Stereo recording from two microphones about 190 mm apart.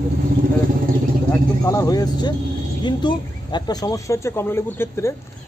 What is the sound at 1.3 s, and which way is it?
Speech, 15° left (ahead or behind).